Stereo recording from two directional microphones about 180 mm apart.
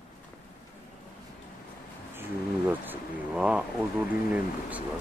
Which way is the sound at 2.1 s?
10° right (ahead or behind).